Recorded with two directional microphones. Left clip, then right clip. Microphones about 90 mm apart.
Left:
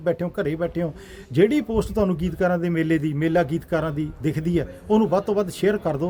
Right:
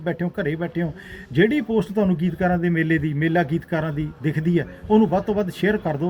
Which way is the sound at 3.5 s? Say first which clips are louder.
Left 1 dB; 35° left (ahead or behind).